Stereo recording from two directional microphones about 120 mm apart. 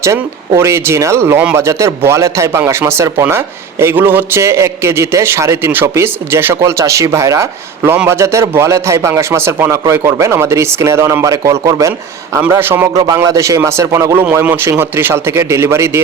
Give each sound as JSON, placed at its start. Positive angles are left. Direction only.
{"t": 0.0, "sound": "speech", "side_deg": -25}